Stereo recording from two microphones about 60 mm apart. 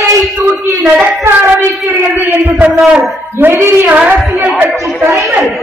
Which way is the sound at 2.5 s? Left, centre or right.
Centre.